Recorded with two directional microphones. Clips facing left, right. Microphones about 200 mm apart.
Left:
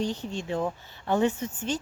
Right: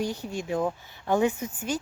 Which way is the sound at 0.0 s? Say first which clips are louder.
Even; 10° right (ahead or behind).